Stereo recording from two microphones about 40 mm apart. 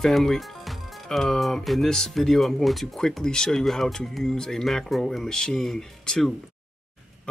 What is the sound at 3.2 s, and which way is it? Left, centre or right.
Speech, centre.